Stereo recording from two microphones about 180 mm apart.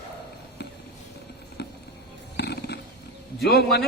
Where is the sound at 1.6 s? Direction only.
65° left (ahead or behind).